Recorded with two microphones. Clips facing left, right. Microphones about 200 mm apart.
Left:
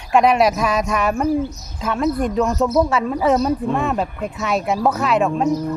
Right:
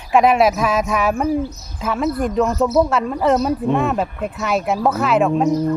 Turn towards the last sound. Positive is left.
turn(degrees=0)  # may be behind; listen again after turning